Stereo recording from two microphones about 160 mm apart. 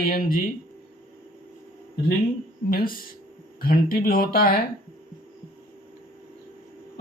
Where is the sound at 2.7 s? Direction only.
65° left (ahead or behind).